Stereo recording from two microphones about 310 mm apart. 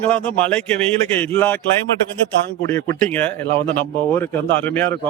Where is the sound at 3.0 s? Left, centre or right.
Centre.